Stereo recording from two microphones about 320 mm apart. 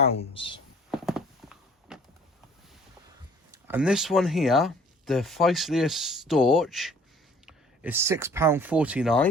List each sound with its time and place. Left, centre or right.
0.0 s speech: centre
0.9 s horse: centre
3.5 s speech: centre